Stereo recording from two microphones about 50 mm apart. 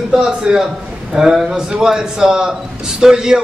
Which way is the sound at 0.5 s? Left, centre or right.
Centre.